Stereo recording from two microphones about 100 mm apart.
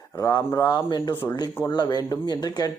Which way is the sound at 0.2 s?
40° left (ahead or behind).